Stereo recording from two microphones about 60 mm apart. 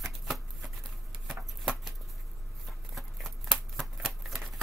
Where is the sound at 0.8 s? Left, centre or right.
Centre.